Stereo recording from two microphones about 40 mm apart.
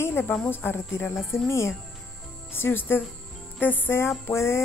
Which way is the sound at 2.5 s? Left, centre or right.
Left.